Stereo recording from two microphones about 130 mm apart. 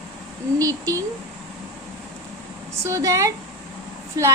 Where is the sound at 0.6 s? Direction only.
25° right (ahead or behind).